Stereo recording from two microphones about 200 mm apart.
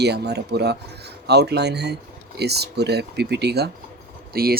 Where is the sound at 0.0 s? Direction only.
55° right (ahead or behind).